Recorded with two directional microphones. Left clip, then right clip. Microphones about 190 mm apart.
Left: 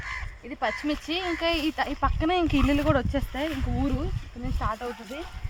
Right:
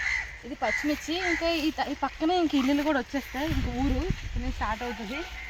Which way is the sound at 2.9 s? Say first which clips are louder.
Left 2 dB; 25° left (ahead or behind).